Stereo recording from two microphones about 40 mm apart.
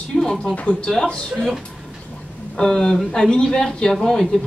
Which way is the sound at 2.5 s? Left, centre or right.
Centre.